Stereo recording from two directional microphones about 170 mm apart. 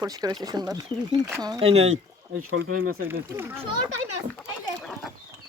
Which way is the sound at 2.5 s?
60° right (ahead or behind).